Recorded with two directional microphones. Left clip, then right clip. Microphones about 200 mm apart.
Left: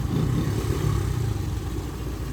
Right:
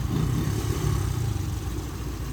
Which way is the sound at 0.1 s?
20° right (ahead or behind).